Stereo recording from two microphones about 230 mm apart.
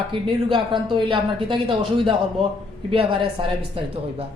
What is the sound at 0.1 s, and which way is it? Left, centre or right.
A man's voice, right.